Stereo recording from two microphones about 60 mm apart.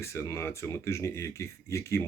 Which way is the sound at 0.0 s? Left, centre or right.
Left.